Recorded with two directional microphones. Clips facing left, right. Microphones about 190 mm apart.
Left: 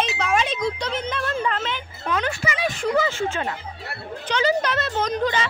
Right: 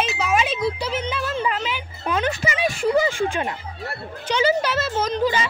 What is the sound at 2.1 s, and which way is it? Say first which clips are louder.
Speech: right 2 dB; 20° right (ahead or behind).